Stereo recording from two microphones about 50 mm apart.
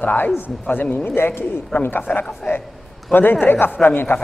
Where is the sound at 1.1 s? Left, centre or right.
Left.